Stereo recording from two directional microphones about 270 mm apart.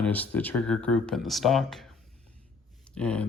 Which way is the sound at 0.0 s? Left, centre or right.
Centre.